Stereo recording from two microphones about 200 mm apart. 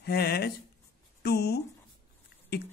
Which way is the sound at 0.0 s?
50° left (ahead or behind).